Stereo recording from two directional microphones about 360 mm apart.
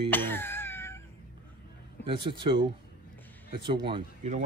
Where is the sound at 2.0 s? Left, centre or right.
Centre.